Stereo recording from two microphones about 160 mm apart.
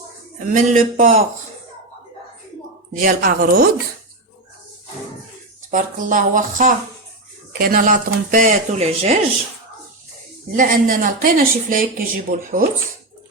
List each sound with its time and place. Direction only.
0.3 s speech: 55° right (ahead or behind)
3.0 s speech: 60° right (ahead or behind)
5.7 s speech: 55° right (ahead or behind)
10.6 s speech: 60° right (ahead or behind)